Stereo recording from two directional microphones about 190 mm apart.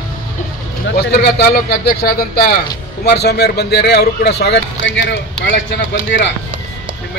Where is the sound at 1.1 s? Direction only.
55° left (ahead or behind).